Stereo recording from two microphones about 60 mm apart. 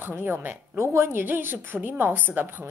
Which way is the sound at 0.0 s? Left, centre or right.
Right.